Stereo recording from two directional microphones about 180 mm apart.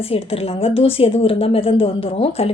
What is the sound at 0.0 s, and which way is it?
Speech, 35° left (ahead or behind).